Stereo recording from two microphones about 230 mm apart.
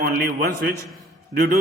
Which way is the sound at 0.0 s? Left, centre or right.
Right.